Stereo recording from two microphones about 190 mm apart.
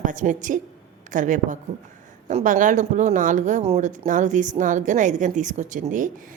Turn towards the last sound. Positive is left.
turn(degrees=-45)  # may be behind; listen again after turning